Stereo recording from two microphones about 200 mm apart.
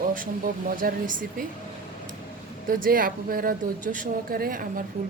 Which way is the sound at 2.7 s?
45° right (ahead or behind).